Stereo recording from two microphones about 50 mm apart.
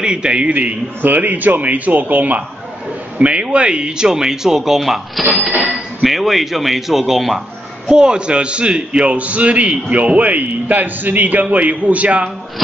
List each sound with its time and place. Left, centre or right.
0.0 s a man's voice: centre; by 2.4 s right
3.2 s a man's voice: right; by 7.4 s centre
7.9 s a man's voice: centre